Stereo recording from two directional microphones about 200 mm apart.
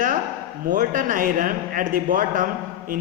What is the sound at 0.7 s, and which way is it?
A man's voice, 40° right (ahead or behind).